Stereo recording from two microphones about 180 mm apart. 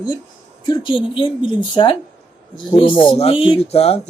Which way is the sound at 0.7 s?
25° left (ahead or behind).